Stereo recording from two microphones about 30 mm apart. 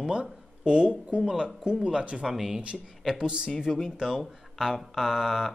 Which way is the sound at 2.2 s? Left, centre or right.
Centre.